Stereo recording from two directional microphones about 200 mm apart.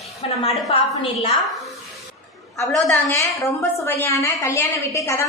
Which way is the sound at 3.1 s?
15° left (ahead or behind).